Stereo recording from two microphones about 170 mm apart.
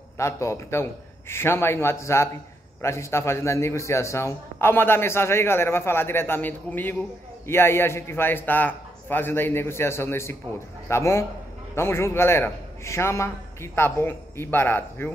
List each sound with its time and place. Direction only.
0.2 s a man's voice: 15° left (ahead or behind)